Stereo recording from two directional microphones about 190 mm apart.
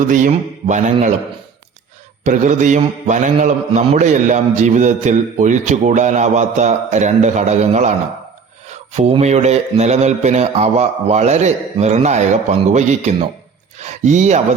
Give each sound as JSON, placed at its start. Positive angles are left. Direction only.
{"t": 0.0, "sound": "mantra", "side_deg": -40}
{"t": 2.2, "sound": "mantra", "side_deg": -40}
{"t": 9.0, "sound": "mantra", "side_deg": -35}